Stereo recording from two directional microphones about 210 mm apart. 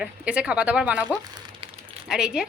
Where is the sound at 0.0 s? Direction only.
5° right (ahead or behind).